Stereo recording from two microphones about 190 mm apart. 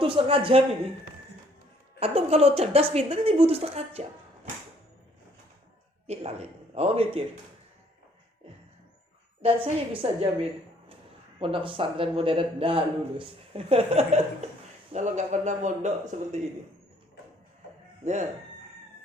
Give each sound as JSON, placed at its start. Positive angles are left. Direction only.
{"t": 0.0, "sound": "a man's voice", "side_deg": -30}
{"t": 2.0, "sound": "speech", "side_deg": -35}
{"t": 6.1, "sound": "speech", "side_deg": -35}
{"t": 9.4, "sound": "speech", "side_deg": -30}
{"t": 11.3, "sound": "a man's voice", "side_deg": -30}
{"t": 18.0, "sound": "speech", "side_deg": -40}